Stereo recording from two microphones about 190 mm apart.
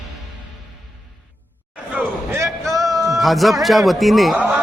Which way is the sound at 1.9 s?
15° right (ahead or behind).